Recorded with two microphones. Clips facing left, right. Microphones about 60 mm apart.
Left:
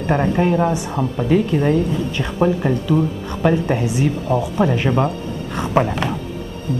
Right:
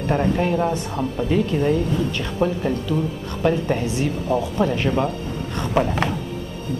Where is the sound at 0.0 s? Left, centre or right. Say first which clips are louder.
Left 3 dB; left.